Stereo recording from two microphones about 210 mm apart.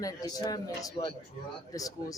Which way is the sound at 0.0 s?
15° left (ahead or behind).